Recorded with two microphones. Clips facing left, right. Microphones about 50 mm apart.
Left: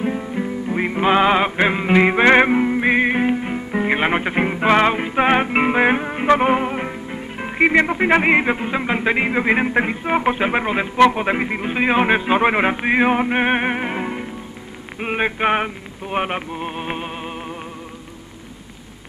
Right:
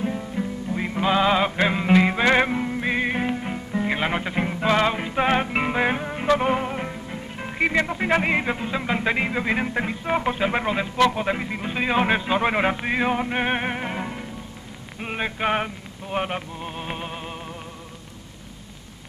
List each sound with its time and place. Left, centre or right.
0.0 s music: left